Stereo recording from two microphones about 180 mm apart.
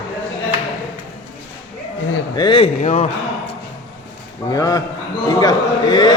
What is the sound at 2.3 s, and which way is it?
Speech, 25° left (ahead or behind).